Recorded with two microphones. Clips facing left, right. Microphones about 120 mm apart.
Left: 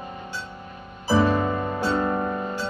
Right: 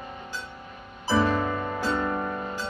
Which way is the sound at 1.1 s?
20° left (ahead or behind).